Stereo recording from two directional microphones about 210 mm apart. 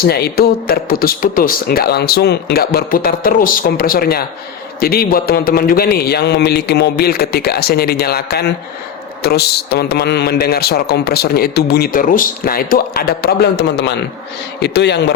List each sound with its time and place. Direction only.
0.0 s a man's voice: 50° left (ahead or behind)